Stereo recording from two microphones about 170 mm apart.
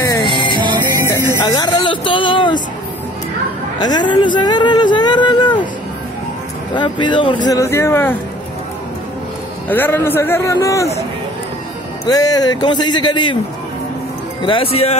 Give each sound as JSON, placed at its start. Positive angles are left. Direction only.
{"t": 0.3, "sound": "music", "side_deg": -30}
{"t": 1.1, "sound": "speech", "side_deg": 20}
{"t": 3.8, "sound": "speech", "side_deg": 25}
{"t": 6.7, "sound": "speech", "side_deg": 25}
{"t": 9.7, "sound": "a man's voice", "side_deg": 10}
{"t": 12.1, "sound": "speech", "side_deg": 20}
{"t": 14.4, "sound": "speech", "side_deg": 30}